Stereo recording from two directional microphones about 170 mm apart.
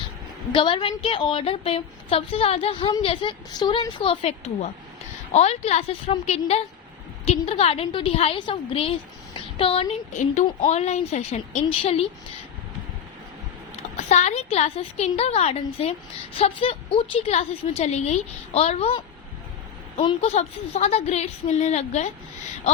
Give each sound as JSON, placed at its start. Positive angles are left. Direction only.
{"t": 0.5, "sound": "a woman's voice", "side_deg": 30}
{"t": 14.1, "sound": "a woman's voice", "side_deg": 40}
{"t": 20.0, "sound": "a woman's voice", "side_deg": 35}